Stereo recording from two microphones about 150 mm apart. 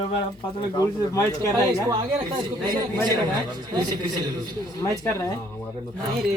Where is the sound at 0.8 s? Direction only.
20° left (ahead or behind).